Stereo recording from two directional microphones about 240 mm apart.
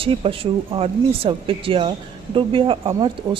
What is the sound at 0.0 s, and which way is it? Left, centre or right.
Speech, right.